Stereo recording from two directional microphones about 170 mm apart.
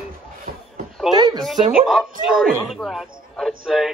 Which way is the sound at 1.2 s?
25° right (ahead or behind).